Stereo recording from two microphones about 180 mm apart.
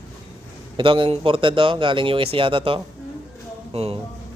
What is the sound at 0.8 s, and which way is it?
A man's voice, 30° right (ahead or behind).